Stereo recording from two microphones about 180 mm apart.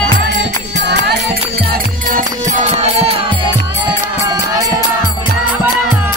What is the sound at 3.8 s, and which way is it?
Music, 20° right (ahead or behind).